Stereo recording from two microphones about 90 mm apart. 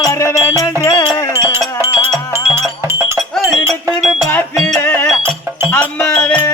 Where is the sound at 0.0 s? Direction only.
35° left (ahead or behind).